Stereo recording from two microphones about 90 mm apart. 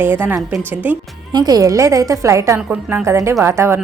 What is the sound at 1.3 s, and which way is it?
A woman's voice, 45° right (ahead or behind).